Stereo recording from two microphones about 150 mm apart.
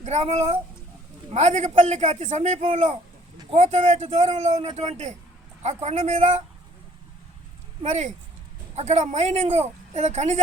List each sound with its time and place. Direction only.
0.0 s speech: 50° right (ahead or behind)
7.9 s speech: 55° right (ahead or behind)